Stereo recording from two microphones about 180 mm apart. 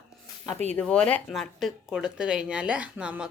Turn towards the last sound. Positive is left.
turn(degrees=-5)  # may be behind; listen again after turning